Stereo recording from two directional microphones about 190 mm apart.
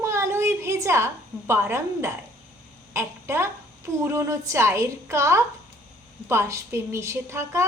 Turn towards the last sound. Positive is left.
turn(degrees=-15)  # may be behind; listen again after turning